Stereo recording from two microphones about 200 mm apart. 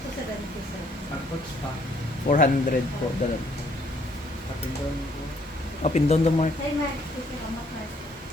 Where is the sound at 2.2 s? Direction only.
40° left (ahead or behind).